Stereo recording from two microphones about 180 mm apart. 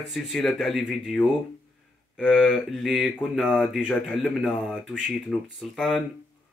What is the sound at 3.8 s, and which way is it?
Speech, 5° left (ahead or behind).